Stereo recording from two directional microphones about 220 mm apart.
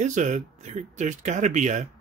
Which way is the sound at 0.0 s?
35° right (ahead or behind).